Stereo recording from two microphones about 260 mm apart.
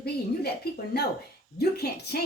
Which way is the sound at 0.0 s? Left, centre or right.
Left.